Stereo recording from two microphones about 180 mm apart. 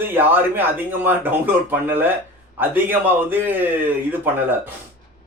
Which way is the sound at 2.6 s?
10° right (ahead or behind).